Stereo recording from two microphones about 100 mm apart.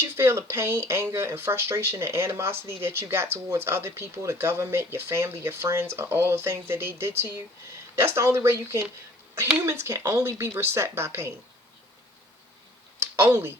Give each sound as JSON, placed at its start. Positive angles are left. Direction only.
{"t": 0.0, "sound": "speech", "side_deg": -25}
{"t": 13.0, "sound": "speech", "side_deg": -25}